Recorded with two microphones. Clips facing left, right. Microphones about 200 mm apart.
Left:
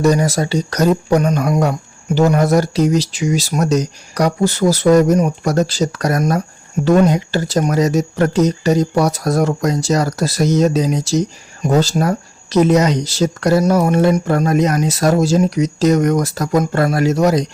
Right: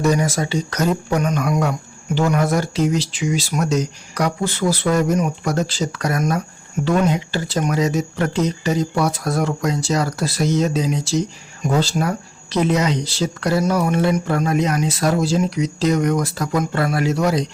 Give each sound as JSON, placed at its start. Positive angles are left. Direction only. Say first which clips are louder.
{"t": 0.0, "sound": "speech", "louder": "left 4 dB", "side_deg": 35}